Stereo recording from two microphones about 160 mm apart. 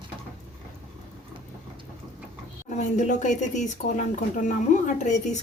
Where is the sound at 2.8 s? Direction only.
50° left (ahead or behind).